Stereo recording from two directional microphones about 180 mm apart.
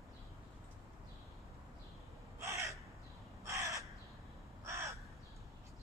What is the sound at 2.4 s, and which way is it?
Crow, 15° right (ahead or behind).